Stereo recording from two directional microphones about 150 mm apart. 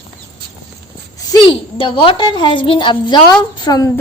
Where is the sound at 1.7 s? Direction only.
35° left (ahead or behind).